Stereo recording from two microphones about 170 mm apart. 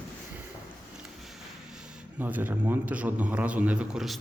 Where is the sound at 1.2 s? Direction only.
5° right (ahead or behind).